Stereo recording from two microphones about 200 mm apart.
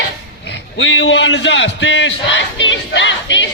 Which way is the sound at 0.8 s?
70° left (ahead or behind).